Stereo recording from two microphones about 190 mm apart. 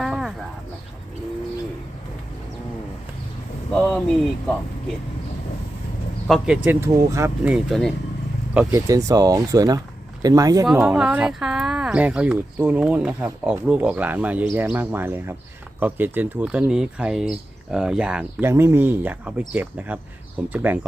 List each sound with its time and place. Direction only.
0.0 s a sound: centre (ahead or behind)
3.7 s speech: 5° left (ahead or behind)
6.2 s speech: centre (ahead or behind)
6.7 s speech: 15° right (ahead or behind)
7.5 s speech: centre (ahead or behind)
8.5 s speech: 15° right (ahead or behind)
10.8 s speech: 5° right (ahead or behind)